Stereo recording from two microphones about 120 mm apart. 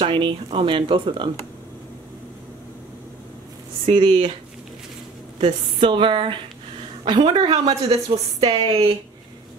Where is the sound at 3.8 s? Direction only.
50° right (ahead or behind).